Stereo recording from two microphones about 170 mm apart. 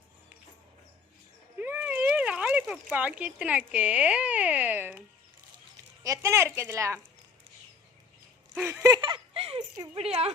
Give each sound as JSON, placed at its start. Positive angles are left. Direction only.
{"t": 1.5, "sound": "speech", "side_deg": -10}
{"t": 8.5, "sound": "speech", "side_deg": -10}
{"t": 8.8, "sound": "giggle", "side_deg": -25}
{"t": 9.7, "sound": "speech", "side_deg": -20}
{"t": 10.0, "sound": "speech", "side_deg": -35}